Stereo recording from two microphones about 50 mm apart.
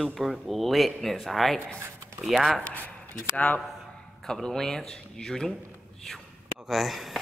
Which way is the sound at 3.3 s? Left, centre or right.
Left.